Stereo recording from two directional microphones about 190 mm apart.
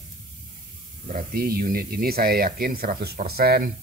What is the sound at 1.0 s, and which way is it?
Speech, 50° right (ahead or behind).